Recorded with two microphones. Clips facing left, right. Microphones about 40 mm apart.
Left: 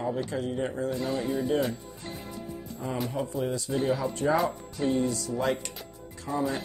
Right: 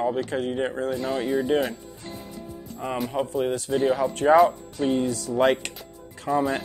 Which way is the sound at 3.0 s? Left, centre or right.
Right.